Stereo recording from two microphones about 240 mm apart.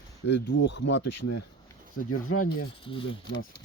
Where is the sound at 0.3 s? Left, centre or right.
Left.